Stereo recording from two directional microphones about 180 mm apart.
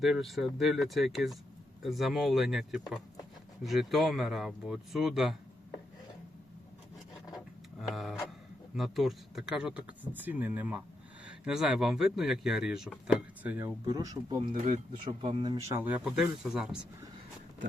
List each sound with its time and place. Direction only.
0.0 s speech: centre (ahead or behind)
7.3 s a sound: centre (ahead or behind)
8.7 s speech: centre (ahead or behind); by 14.5 s 25° right (ahead or behind)
14.5 s speech: 45° right (ahead or behind)
15.0 s speech: 30° right (ahead or behind); by 16.6 s 5° right (ahead or behind)